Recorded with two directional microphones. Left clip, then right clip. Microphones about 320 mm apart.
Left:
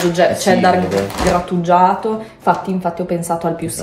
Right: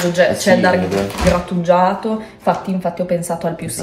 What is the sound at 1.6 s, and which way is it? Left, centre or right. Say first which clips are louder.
Speech: left 1 dB; centre.